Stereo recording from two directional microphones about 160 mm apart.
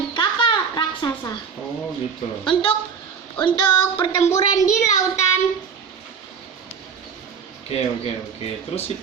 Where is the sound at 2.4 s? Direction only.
30° left (ahead or behind).